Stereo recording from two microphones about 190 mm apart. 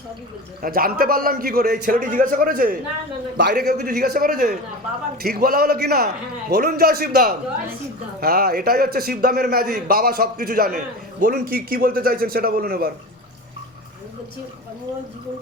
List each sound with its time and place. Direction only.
0.6 s a man's voice: 50° right (ahead or behind)